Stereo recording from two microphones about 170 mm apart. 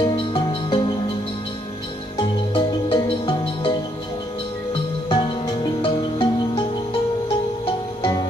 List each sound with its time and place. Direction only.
0.0 s music: 30° left (ahead or behind)
2.1 s music: 30° left (ahead or behind)
5.1 s music: 30° left (ahead or behind)